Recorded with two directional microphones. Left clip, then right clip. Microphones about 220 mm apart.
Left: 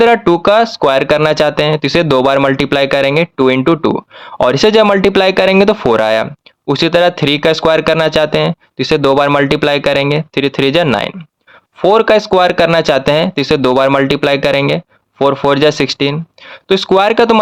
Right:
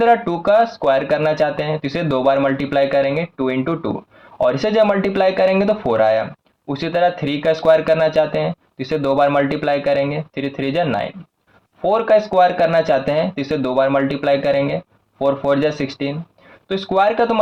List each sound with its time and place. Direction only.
0.0 s speech: 50° left (ahead or behind)